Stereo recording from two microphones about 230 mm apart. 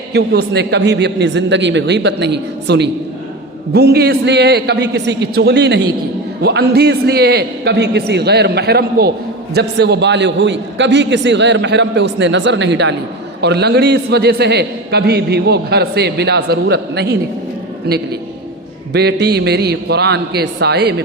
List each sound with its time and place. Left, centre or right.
0.1 s a man's voice: right
18.9 s a man's voice: right